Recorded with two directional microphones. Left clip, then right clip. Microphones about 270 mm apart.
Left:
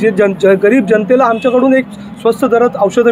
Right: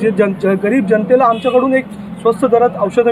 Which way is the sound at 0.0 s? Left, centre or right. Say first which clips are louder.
Left 4 dB; left.